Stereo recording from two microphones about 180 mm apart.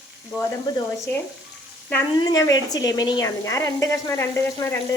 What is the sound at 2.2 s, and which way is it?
A woman's voice, 20° left (ahead or behind).